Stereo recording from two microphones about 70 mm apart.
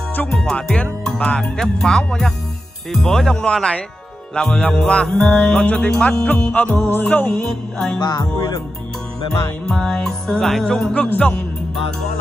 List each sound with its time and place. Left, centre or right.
0.3 s music: centre; by 7.3 s left
8.0 s music: left
9.7 s music: centre